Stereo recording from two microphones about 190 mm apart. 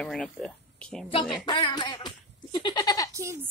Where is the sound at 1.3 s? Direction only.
20° left (ahead or behind).